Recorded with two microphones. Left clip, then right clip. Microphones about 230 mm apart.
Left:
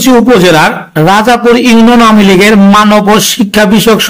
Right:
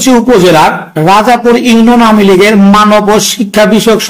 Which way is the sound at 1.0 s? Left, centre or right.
Left.